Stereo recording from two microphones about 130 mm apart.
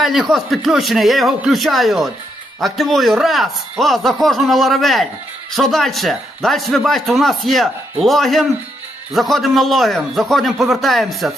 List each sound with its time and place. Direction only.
0.0 s speech: centre (ahead or behind)